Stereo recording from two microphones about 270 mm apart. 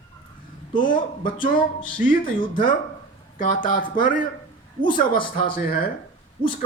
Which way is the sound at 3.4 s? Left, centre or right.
Left.